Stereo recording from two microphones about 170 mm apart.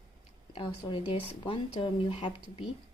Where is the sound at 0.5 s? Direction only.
30° left (ahead or behind).